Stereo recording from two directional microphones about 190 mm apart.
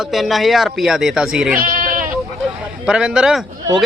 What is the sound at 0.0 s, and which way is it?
A man's voice, centre (ahead or behind).